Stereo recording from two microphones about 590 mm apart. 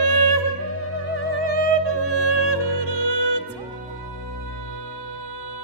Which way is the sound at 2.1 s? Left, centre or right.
Left.